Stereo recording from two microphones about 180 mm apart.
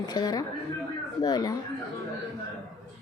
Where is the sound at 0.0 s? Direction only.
20° left (ahead or behind).